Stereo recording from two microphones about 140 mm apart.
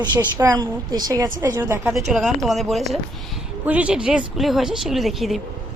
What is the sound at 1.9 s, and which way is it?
Speech, centre (ahead or behind).